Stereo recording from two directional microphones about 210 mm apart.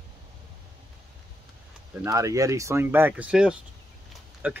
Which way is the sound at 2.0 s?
15° right (ahead or behind).